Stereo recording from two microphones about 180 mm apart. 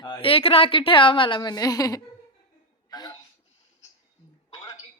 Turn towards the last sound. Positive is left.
turn(degrees=20)  # may be behind; listen again after turning